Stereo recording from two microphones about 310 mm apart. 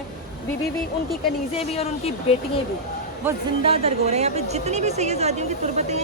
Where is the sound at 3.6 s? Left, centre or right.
Centre.